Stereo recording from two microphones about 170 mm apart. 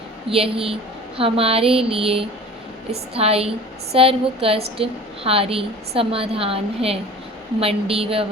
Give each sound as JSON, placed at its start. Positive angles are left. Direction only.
{"t": 0.3, "sound": "a woman's voice", "side_deg": -30}